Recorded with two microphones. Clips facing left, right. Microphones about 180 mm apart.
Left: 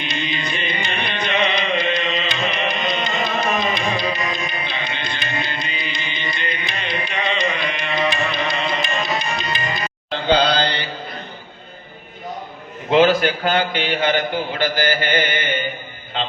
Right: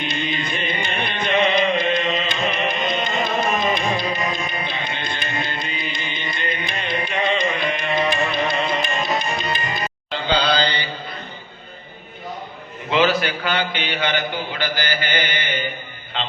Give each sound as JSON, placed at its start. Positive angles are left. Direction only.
{"t": 0.0, "sound": "music", "side_deg": -50}
{"t": 12.9, "sound": "a man's voice", "side_deg": 50}